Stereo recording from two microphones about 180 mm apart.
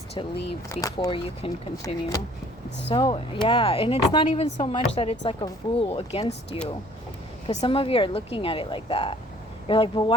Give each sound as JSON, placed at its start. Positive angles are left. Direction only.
{"t": 0.7, "sound": "speech", "side_deg": 20}
{"t": 1.8, "sound": "speech", "side_deg": 20}
{"t": 2.6, "sound": "speech", "side_deg": 75}
{"t": 2.9, "sound": "speech", "side_deg": 25}
{"t": 4.3, "sound": "a woman's voice", "side_deg": 40}